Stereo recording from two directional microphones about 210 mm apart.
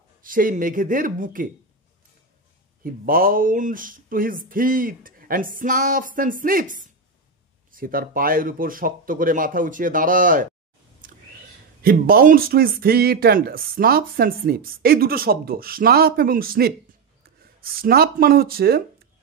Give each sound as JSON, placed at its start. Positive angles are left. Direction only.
{"t": 0.2, "sound": "speech", "side_deg": -40}
{"t": 2.8, "sound": "speech", "side_deg": -45}
{"t": 11.0, "sound": "a sound", "side_deg": -40}
{"t": 11.8, "sound": "speech", "side_deg": -45}